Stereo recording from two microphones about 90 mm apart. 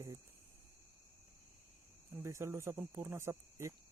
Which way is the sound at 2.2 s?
30° right (ahead or behind).